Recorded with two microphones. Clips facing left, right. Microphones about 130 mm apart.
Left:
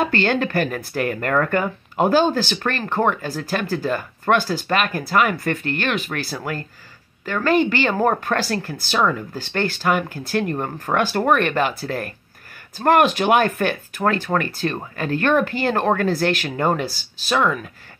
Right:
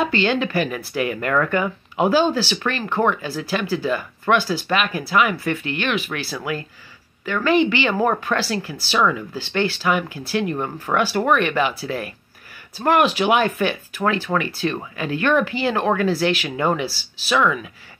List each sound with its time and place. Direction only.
0.0 s speech: 50° left (ahead or behind)